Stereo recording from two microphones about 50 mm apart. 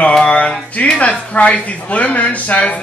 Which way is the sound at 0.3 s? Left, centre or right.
Left.